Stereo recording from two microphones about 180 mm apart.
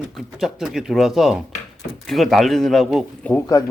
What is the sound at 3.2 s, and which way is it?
Speech, 15° left (ahead or behind).